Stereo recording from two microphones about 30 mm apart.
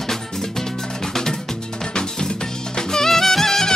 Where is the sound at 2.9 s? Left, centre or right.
Centre.